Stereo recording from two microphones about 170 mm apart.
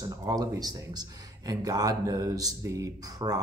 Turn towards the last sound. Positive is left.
turn(degrees=-20)  # may be behind; listen again after turning